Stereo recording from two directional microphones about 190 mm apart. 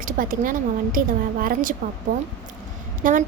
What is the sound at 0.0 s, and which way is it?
A woman's voice, 45° right (ahead or behind).